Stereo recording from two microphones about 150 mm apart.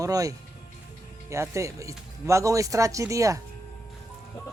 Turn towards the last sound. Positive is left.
turn(degrees=-20)  # may be behind; listen again after turning